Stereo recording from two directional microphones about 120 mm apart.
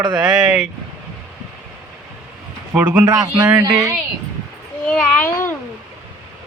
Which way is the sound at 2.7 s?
15° right (ahead or behind).